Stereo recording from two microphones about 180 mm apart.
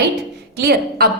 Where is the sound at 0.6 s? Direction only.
60° right (ahead or behind).